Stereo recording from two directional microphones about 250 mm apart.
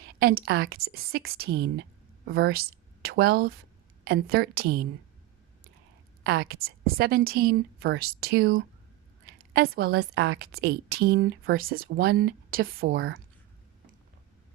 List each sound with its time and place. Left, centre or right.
0.0 s a woman's voice: right
6.2 s a woman's voice: right